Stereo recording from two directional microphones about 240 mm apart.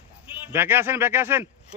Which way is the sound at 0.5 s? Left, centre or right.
Centre.